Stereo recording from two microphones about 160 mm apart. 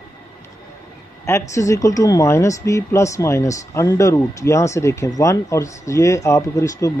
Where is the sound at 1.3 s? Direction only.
20° left (ahead or behind).